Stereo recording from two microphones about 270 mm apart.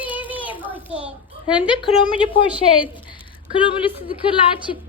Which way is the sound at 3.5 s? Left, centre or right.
Centre.